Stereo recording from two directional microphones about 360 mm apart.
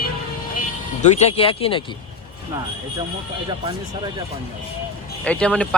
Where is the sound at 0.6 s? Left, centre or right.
Centre.